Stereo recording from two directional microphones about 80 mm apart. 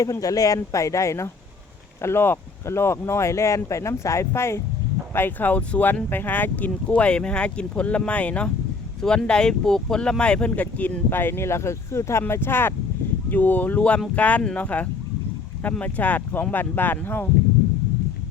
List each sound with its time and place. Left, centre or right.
0.0 s speech: left